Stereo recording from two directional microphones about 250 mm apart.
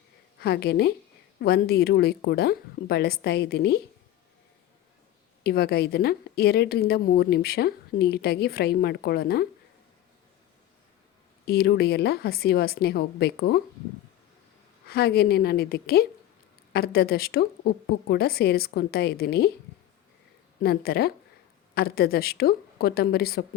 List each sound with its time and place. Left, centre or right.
0.3 s a woman's voice: left
5.4 s a woman's voice: left
11.4 s a woman's voice: left
14.8 s a woman's voice: left
20.6 s a woman's voice: left